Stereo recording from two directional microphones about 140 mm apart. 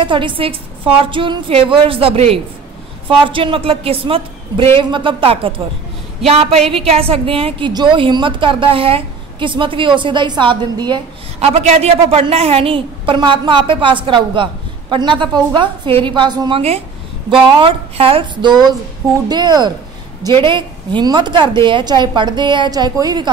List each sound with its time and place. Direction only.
0.0 s a woman's voice: 35° right (ahead or behind)
11.3 s a woman's voice: 50° right (ahead or behind); by 23.3 s 30° right (ahead or behind)